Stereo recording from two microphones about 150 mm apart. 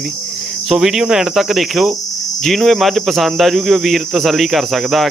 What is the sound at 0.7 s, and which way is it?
Speech, centre (ahead or behind).